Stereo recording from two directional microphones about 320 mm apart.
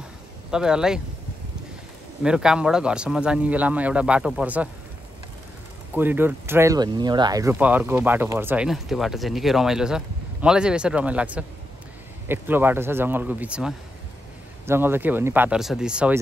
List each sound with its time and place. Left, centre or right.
0.5 s speech: centre
2.2 s speech: centre
5.9 s speech: centre